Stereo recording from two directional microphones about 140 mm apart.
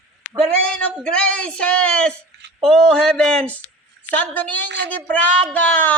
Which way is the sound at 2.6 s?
5° left (ahead or behind).